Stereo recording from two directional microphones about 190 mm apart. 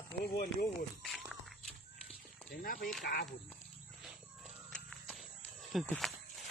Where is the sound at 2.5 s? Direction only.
50° left (ahead or behind).